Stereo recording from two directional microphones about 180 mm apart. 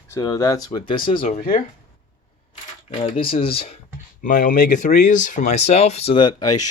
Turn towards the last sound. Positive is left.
turn(degrees=25)  # may be behind; listen again after turning